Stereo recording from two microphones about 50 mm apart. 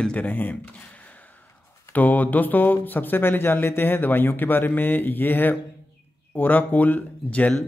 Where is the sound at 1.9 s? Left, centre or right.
Left.